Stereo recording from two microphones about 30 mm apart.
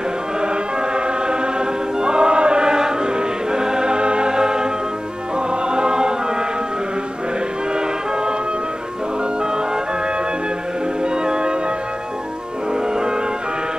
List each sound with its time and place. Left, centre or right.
0.9 s choir: right
5.5 s music: right
11.2 s music: right